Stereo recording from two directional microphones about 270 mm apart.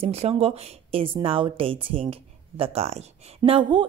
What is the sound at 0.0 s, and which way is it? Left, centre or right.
A woman's voice, right.